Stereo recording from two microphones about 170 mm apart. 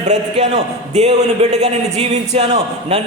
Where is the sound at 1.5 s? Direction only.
40° right (ahead or behind).